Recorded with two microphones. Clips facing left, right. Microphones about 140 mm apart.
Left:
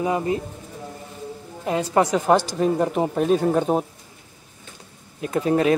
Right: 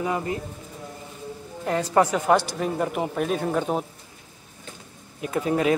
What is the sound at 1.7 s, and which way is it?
Speech, 15° left (ahead or behind).